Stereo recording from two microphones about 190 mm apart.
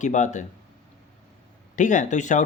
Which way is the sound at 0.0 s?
40° left (ahead or behind).